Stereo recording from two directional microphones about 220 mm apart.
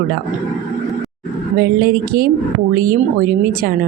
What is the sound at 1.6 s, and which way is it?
Speech, 45° right (ahead or behind).